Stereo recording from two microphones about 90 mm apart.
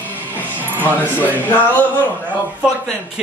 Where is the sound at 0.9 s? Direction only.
20° left (ahead or behind).